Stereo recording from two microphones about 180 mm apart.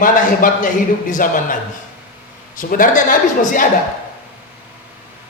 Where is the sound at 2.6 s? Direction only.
50° left (ahead or behind).